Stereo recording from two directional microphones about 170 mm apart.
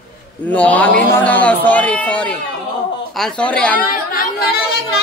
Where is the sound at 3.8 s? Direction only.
60° left (ahead or behind).